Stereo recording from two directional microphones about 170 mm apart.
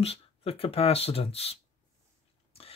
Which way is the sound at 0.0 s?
35° left (ahead or behind).